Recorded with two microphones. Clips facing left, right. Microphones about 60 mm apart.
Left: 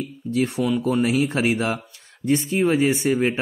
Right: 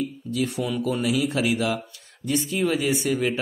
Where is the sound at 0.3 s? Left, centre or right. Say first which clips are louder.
Left 6 dB; left.